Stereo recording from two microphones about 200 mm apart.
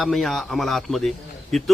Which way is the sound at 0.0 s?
Centre (ahead or behind).